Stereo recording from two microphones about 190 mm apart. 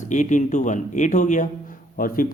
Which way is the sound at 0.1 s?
40° left (ahead or behind).